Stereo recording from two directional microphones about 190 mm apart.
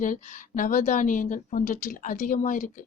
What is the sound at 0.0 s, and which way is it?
Speech, 45° left (ahead or behind).